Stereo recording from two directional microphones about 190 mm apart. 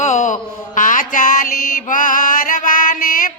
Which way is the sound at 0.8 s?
45° left (ahead or behind).